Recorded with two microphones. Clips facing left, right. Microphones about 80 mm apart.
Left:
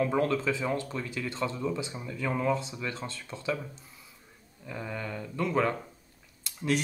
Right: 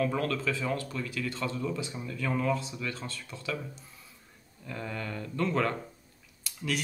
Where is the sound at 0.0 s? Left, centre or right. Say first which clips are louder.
Left 3 dB; left.